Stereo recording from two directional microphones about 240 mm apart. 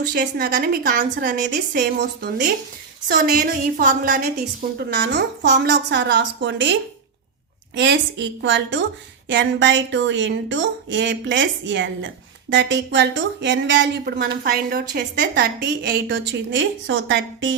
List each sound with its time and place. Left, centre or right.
0.1 s a woman's voice: right
7.8 s speech: right